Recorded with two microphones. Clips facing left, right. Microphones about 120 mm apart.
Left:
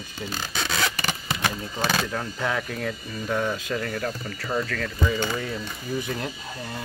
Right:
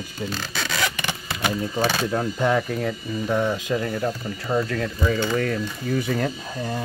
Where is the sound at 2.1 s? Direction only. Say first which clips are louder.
Right 6 dB; 10° right (ahead or behind).